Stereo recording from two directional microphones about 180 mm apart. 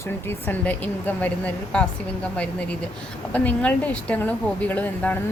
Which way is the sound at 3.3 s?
10° left (ahead or behind).